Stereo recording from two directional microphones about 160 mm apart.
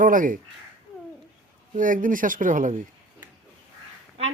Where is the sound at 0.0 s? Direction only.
60° right (ahead or behind).